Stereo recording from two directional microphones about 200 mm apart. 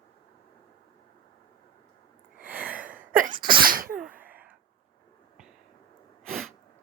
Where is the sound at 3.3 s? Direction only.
25° right (ahead or behind).